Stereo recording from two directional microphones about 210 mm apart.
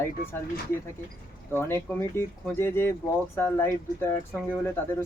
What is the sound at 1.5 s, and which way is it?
Speech, 10° left (ahead or behind).